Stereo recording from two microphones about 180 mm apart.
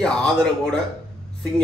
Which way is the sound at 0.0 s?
5° left (ahead or behind).